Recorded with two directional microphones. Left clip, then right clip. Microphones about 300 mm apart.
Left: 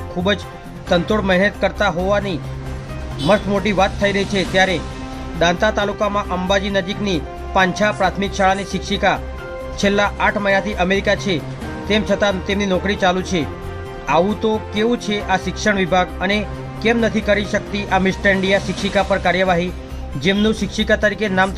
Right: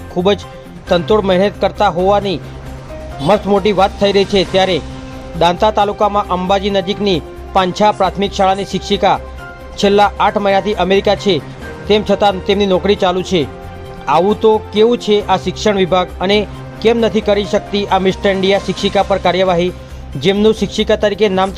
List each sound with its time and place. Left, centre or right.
0.2 s a man's voice: centre